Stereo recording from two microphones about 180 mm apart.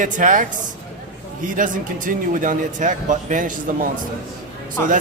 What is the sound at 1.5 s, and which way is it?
Speech, 50° right (ahead or behind).